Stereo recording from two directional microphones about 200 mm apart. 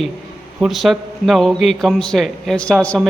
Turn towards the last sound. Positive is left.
turn(degrees=0)  # may be behind; listen again after turning